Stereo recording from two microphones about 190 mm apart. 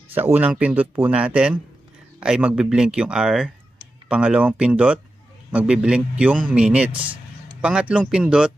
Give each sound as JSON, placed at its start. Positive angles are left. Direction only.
{"t": 0.1, "sound": "a man's voice", "side_deg": -10}